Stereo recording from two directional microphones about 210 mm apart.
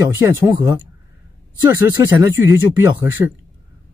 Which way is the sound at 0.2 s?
15° right (ahead or behind).